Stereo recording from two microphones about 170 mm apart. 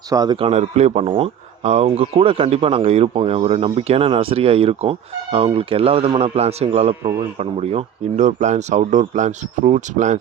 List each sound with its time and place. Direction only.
0.1 s speech: 25° right (ahead or behind)
7.0 s a man's voice: 20° right (ahead or behind)
7.3 s speech: 40° right (ahead or behind)